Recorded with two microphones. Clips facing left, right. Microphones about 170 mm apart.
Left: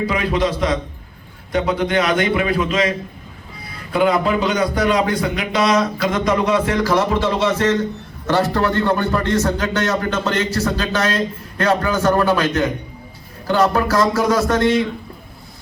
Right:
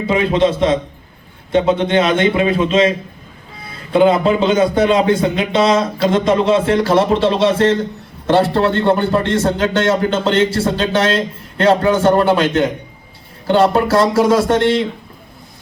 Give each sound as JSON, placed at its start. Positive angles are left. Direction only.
{"t": 0.0, "sound": "a man's voice", "side_deg": -25}